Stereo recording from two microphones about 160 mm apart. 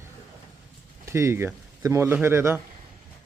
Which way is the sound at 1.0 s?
15° right (ahead or behind).